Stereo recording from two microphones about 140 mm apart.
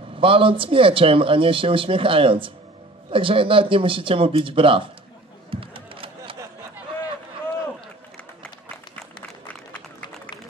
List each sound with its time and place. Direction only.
0.2 s speech: 40° right (ahead or behind)
5.5 s a sound: 40° right (ahead or behind)
9.5 s run: 10° left (ahead or behind)